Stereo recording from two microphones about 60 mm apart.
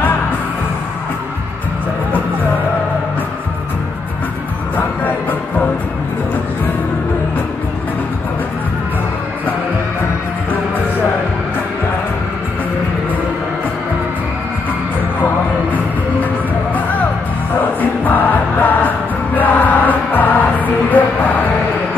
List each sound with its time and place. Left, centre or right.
17.6 s music: left